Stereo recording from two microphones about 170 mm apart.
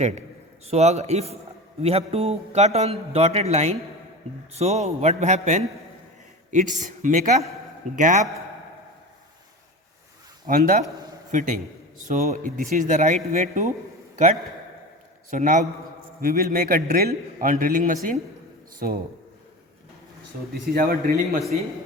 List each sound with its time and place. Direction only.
0.6 s a man's voice: 40° right (ahead or behind)
10.4 s a man's voice: 55° right (ahead or behind)
15.3 s a man's voice: 50° right (ahead or behind)
16.2 s a man's voice: 60° right (ahead or behind)
20.5 s a man's voice: 60° right (ahead or behind)